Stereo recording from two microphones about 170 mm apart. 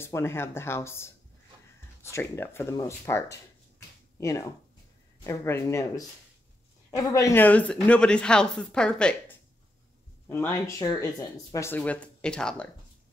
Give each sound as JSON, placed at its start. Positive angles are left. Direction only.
{"t": 0.0, "sound": "speech", "side_deg": 15}
{"t": 7.1, "sound": "a woman's voice", "side_deg": 20}
{"t": 10.2, "sound": "speech", "side_deg": 15}